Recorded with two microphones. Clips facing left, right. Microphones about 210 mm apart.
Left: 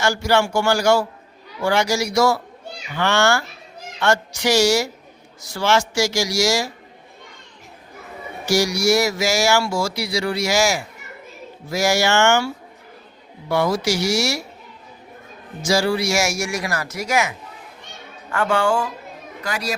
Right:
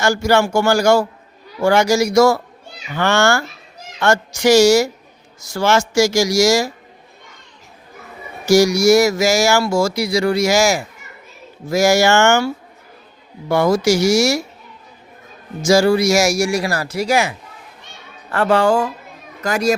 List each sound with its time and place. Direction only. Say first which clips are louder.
0.0 s speech: right 3 dB; 45° right (ahead or behind)
8.4 s speech: right 7 dB; 45° right (ahead or behind)
13.5 s speech: right 5 dB; 45° right (ahead or behind)
15.6 s speech: right 6 dB; 45° right (ahead or behind)